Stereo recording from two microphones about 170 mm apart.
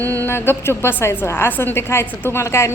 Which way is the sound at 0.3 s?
15° left (ahead or behind).